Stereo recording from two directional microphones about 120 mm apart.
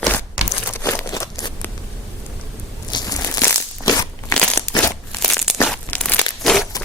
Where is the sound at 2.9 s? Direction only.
35° left (ahead or behind).